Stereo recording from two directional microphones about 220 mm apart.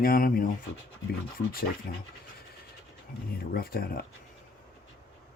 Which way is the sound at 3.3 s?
45° left (ahead or behind).